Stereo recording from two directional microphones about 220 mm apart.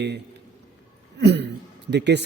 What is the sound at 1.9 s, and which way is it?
Speech, 50° right (ahead or behind).